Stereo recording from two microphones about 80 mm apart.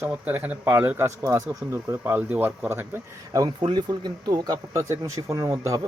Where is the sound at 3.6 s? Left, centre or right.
Right.